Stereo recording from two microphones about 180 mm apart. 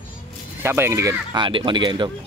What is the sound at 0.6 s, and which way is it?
Speech, 15° right (ahead or behind).